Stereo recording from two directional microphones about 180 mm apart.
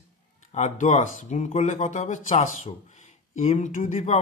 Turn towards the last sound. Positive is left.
turn(degrees=45)  # may be behind; listen again after turning